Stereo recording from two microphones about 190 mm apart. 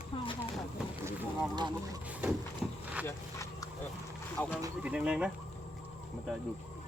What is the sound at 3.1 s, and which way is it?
Speech, 15° left (ahead or behind).